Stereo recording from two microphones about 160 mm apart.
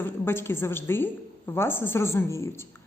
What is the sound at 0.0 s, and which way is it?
A woman's voice, 15° left (ahead or behind).